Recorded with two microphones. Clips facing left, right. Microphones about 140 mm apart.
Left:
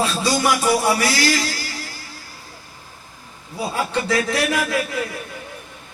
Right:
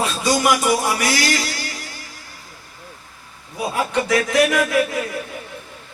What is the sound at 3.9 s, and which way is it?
Speech, 30° left (ahead or behind).